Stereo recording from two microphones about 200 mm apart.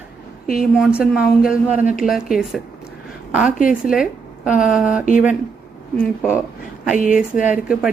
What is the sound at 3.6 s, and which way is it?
Speech, 45° left (ahead or behind).